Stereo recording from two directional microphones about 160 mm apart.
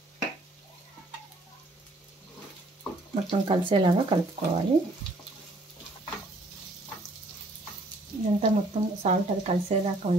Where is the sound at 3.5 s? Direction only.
30° right (ahead or behind).